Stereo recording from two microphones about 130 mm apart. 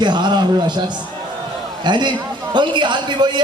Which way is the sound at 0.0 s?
35° right (ahead or behind).